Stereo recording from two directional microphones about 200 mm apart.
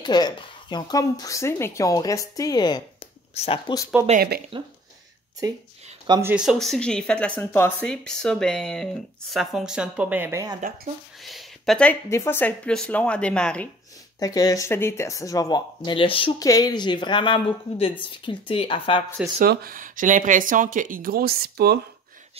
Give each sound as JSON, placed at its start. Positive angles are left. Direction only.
{"t": 0.0, "sound": "speech", "side_deg": 20}
{"t": 4.5, "sound": "speech", "side_deg": -25}
{"t": 6.0, "sound": "speech", "side_deg": -20}
{"t": 6.3, "sound": "speech", "side_deg": 0}
{"t": 11.2, "sound": "speech", "side_deg": 0}
{"t": 14.2, "sound": "speech", "side_deg": 20}
{"t": 19.4, "sound": "speech", "side_deg": -50}